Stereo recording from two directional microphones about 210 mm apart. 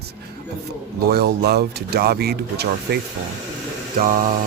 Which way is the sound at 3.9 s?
40° right (ahead or behind).